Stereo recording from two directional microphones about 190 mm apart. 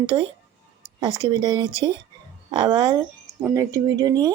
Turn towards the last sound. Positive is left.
turn(degrees=-20)  # may be behind; listen again after turning